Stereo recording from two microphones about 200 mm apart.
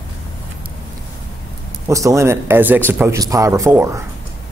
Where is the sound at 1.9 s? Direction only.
15° right (ahead or behind).